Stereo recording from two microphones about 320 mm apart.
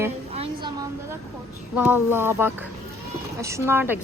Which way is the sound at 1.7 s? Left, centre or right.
Centre.